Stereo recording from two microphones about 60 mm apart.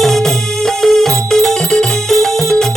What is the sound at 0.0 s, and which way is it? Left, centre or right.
Music, centre.